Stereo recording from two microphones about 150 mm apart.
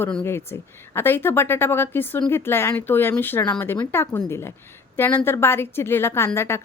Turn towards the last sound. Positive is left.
turn(degrees=15)  # may be behind; listen again after turning